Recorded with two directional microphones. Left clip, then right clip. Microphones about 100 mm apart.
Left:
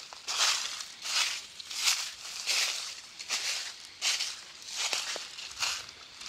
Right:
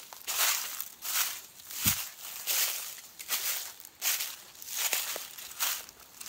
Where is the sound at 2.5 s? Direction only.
Centre (ahead or behind).